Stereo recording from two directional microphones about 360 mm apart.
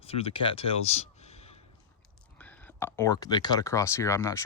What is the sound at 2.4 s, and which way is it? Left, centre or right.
Speech, centre.